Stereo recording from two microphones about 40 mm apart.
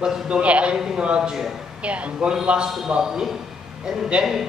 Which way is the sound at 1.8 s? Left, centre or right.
Right.